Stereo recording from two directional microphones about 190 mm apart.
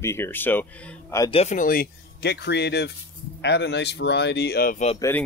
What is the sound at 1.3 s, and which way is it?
Speech, 40° left (ahead or behind).